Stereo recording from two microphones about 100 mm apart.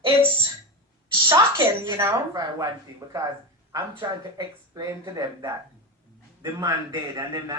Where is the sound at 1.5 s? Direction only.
50° right (ahead or behind).